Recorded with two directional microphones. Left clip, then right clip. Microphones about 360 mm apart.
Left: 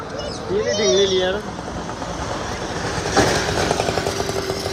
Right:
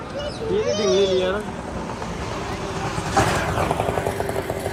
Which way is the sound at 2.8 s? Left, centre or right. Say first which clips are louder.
Left 3 dB; left.